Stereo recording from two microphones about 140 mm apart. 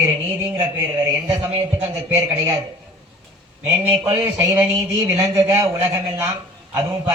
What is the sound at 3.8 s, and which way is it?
Speech, 20° right (ahead or behind).